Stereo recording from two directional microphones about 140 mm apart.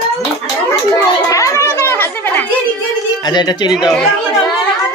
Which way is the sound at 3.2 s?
30° left (ahead or behind).